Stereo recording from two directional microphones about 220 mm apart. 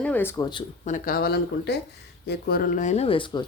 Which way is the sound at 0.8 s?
35° left (ahead or behind).